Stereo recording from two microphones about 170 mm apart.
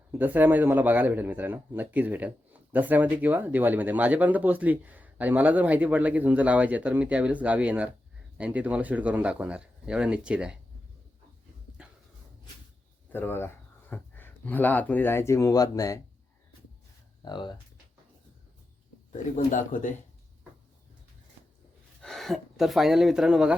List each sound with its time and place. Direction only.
0.1 s speech: 10° right (ahead or behind)
11.8 s dog: 5° right (ahead or behind)
13.1 s speech: 10° left (ahead or behind)
17.2 s speech: 25° left (ahead or behind)
19.1 s speech: 50° left (ahead or behind)
22.0 s speech: centre (ahead or behind)